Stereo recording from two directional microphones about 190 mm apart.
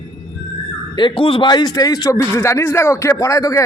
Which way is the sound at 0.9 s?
25° left (ahead or behind).